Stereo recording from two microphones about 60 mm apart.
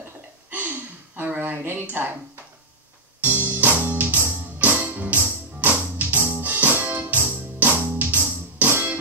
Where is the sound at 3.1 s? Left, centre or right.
Right.